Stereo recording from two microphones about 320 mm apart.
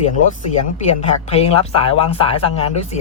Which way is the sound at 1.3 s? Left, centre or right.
Centre.